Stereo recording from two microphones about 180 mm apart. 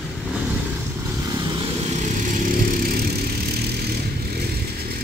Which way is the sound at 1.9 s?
40° right (ahead or behind).